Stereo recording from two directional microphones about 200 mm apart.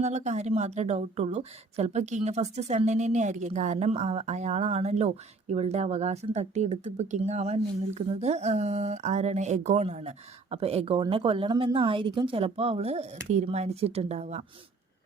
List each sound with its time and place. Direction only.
0.0 s a woman's voice: 35° right (ahead or behind)